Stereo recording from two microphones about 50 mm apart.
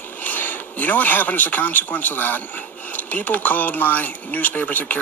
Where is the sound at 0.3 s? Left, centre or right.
Left.